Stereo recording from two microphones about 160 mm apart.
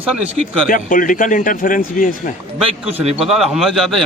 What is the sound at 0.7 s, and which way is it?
Speech, 60° left (ahead or behind).